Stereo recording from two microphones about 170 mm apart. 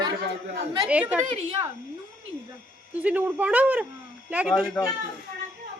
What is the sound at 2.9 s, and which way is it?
Speech, 10° right (ahead or behind).